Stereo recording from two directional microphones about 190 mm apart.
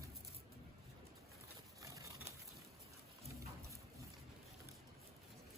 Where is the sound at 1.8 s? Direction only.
15° right (ahead or behind).